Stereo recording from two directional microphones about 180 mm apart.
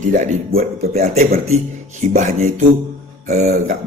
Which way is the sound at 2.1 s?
40° right (ahead or behind).